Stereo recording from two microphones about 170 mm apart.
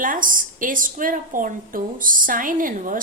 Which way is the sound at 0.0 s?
50° right (ahead or behind).